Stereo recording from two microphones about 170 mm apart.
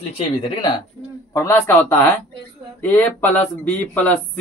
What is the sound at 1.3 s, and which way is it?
Speech, 15° left (ahead or behind).